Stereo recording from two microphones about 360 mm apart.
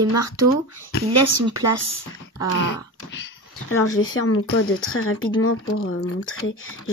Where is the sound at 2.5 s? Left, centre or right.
Left.